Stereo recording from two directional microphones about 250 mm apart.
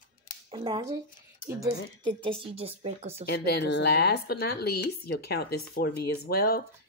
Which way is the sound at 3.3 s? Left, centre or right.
Left.